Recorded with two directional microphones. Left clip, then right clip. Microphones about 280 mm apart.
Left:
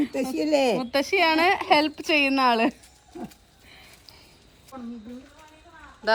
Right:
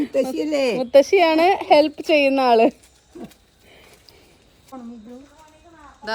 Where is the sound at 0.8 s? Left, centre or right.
Left.